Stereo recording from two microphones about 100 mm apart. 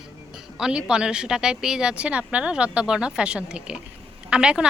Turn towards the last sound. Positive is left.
turn(degrees=-10)  # may be behind; listen again after turning